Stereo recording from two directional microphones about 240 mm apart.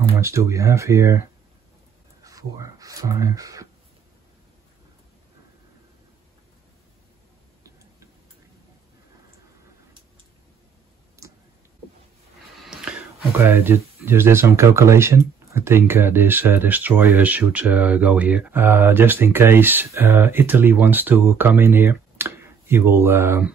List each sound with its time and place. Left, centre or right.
0.2 s speech: centre
2.2 s speech: centre
11.2 s a sound: centre
13.4 s speech: centre